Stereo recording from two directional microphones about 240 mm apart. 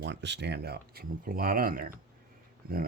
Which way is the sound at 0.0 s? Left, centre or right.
Right.